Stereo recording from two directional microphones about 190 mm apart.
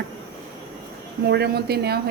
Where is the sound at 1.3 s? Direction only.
60° right (ahead or behind).